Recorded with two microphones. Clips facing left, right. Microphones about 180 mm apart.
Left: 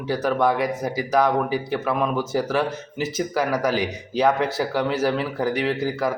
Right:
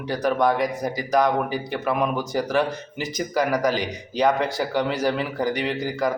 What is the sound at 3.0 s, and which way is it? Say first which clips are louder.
A man's voice: even; 5° left (ahead or behind).